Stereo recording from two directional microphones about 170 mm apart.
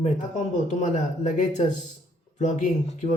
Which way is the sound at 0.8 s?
45° left (ahead or behind).